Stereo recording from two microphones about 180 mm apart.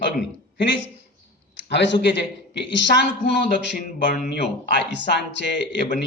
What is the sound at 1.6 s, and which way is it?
Speech, 75° left (ahead or behind).